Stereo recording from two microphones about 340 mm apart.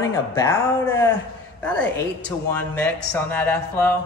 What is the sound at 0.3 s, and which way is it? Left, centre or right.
A man's voice, centre.